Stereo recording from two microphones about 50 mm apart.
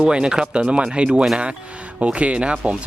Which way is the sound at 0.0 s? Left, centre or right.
Centre.